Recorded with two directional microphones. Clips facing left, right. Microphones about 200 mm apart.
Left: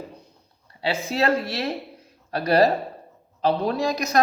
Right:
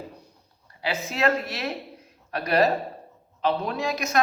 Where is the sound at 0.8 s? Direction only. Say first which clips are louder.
Left 2 dB; 30° left (ahead or behind).